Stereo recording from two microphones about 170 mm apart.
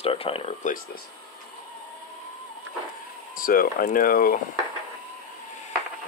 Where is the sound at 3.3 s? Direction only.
55° left (ahead or behind).